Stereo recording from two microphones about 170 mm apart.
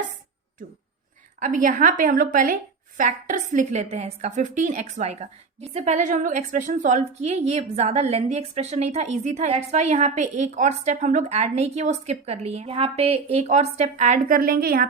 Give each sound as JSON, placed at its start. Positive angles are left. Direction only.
{"t": 1.4, "sound": "a woman's voice", "side_deg": -50}